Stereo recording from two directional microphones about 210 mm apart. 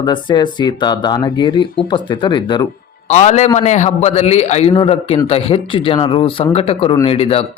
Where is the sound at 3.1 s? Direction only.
35° left (ahead or behind).